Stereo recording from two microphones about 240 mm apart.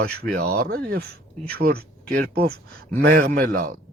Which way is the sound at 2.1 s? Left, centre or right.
Right.